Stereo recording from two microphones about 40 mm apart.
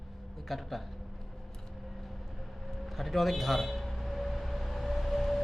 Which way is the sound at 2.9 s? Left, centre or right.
Centre.